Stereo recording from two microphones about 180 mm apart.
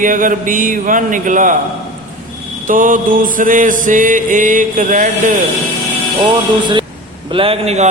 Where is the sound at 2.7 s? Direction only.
50° right (ahead or behind).